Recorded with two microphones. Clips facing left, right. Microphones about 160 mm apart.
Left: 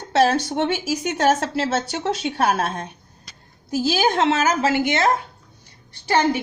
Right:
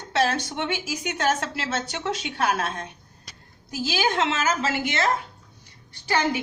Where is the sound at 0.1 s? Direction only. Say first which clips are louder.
Left 6 dB; 40° left (ahead or behind).